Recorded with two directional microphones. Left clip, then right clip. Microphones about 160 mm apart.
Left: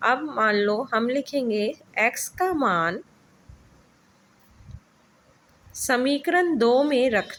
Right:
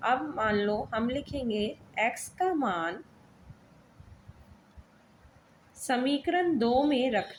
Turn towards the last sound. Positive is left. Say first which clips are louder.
# left 6 dB
turn(degrees=50)  # may be behind; listen again after turning